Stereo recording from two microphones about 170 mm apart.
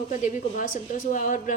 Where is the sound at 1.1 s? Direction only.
50° left (ahead or behind).